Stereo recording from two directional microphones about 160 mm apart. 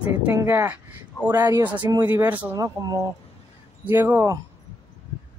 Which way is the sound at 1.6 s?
10° right (ahead or behind).